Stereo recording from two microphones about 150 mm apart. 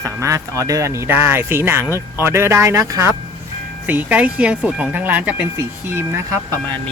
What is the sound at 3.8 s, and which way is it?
Speech, 10° right (ahead or behind).